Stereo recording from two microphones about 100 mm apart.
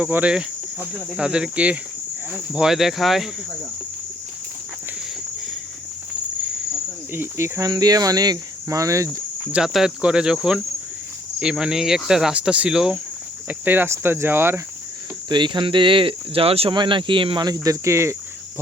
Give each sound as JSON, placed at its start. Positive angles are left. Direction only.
{"t": 0.0, "sound": "speech", "side_deg": -15}
{"t": 7.1, "sound": "cricket", "side_deg": -25}
{"t": 7.7, "sound": "cricket", "side_deg": -40}
{"t": 9.5, "sound": "speech", "side_deg": -5}
{"t": 13.5, "sound": "cricket", "side_deg": -20}
{"t": 15.3, "sound": "speech", "side_deg": -50}
{"t": 16.7, "sound": "speech", "side_deg": -55}
{"t": 17.4, "sound": "cricket", "side_deg": -35}